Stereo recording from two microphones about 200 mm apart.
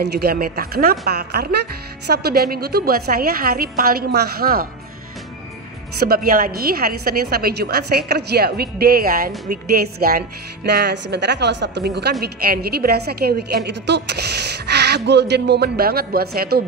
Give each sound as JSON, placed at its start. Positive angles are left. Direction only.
{"t": 0.0, "sound": "a woman's voice", "side_deg": -50}
{"t": 5.9, "sound": "a woman's voice", "side_deg": -50}